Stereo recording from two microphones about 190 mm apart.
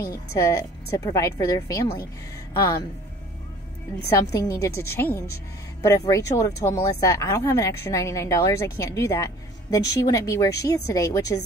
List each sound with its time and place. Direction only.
0.0 s speech: 15° left (ahead or behind)
4.2 s speech: 20° left (ahead or behind)